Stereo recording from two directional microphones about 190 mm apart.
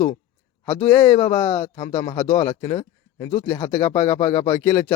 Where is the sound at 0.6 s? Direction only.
10° left (ahead or behind).